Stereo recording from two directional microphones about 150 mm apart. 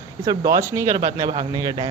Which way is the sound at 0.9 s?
30° right (ahead or behind).